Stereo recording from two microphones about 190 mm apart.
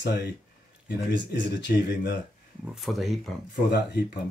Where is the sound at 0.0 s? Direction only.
60° left (ahead or behind).